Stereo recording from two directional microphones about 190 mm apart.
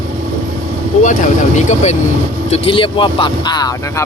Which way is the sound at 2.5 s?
25° left (ahead or behind).